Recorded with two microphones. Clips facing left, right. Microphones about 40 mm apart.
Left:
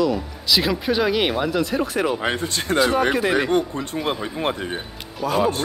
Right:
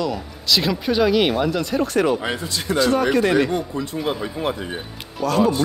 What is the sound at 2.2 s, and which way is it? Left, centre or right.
Speech, left.